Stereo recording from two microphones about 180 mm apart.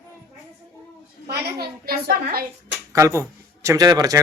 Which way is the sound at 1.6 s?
60° right (ahead or behind).